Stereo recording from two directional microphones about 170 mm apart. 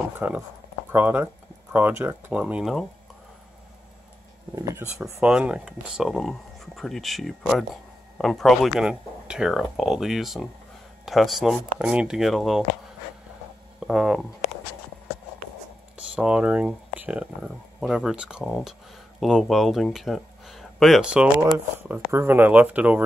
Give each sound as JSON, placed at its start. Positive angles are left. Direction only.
{"t": 0.2, "sound": "speech", "side_deg": -10}
{"t": 4.6, "sound": "speech", "side_deg": -20}
{"t": 5.2, "sound": "speech", "side_deg": -5}
{"t": 13.7, "sound": "speech", "side_deg": -5}
{"t": 16.0, "sound": "speech", "side_deg": -5}